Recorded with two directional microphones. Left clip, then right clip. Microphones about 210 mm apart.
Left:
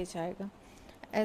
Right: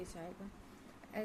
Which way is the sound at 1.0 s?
35° left (ahead or behind).